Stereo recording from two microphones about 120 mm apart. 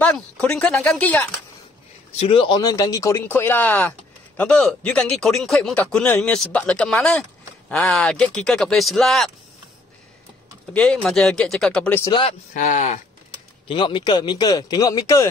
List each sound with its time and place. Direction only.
0.0 s speech: 10° left (ahead or behind)
2.1 s speech: 50° left (ahead or behind)
2.6 s speech: 30° left (ahead or behind); by 9.3 s centre (ahead or behind)
10.7 s speech: 5° left (ahead or behind)
12.1 s speech: 45° left (ahead or behind)
12.5 s speech: 90° left
13.7 s speech: 45° left (ahead or behind)